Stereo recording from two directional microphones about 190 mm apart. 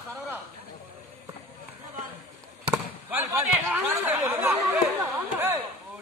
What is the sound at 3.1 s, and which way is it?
Speech, 10° right (ahead or behind).